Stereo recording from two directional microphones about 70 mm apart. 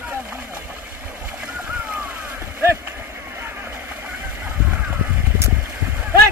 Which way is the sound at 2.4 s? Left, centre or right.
Right.